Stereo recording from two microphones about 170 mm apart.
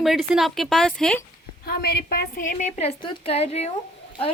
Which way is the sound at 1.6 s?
65° left (ahead or behind).